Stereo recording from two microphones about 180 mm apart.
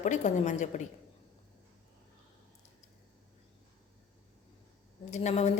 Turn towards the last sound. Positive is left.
turn(degrees=40)  # may be behind; listen again after turning